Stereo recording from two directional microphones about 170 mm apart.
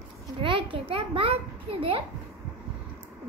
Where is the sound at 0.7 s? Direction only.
30° right (ahead or behind).